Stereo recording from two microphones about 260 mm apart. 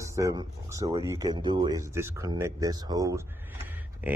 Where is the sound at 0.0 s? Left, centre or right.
Centre.